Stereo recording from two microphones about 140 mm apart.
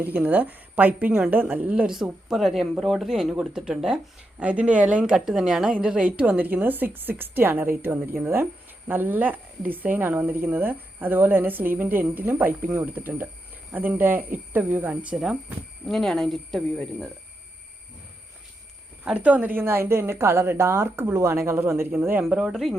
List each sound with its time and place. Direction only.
0.0 s a woman's voice: 10° right (ahead or behind)
15.1 s speech: centre (ahead or behind)
19.0 s a woman's voice: 10° right (ahead or behind)